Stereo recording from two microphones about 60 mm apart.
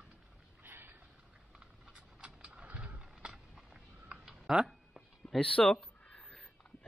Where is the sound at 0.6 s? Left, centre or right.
Right.